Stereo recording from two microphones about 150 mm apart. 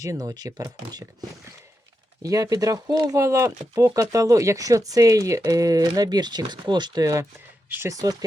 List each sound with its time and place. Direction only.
0.0 s speech: 25° right (ahead or behind)
2.2 s speech: 25° right (ahead or behind)